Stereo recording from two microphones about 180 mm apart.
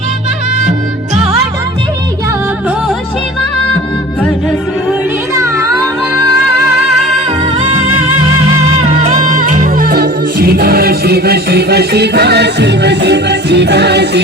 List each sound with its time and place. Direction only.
5.3 s music: 15° right (ahead or behind)
8.8 s music: 40° right (ahead or behind); by 14.2 s 70° right (ahead or behind)